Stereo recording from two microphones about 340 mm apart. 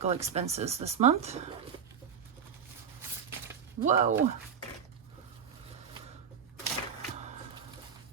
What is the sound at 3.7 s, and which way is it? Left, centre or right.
Speech, right.